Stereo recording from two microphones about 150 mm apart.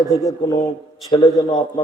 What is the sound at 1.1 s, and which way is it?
Mantra, 35° left (ahead or behind).